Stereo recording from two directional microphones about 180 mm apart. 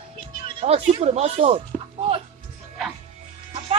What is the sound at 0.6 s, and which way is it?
Speech, 35° right (ahead or behind).